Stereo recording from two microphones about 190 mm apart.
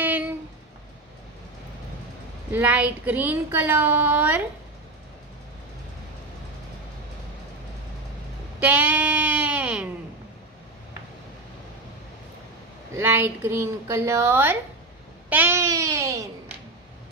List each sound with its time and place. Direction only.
0.0 s a sound: 10° right (ahead or behind)
2.5 s speech: 10° right (ahead or behind)
8.6 s bleat: 10° right (ahead or behind)
12.9 s speech: 10° right (ahead or behind)